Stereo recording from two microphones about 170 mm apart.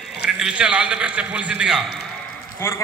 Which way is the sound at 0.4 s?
5° right (ahead or behind).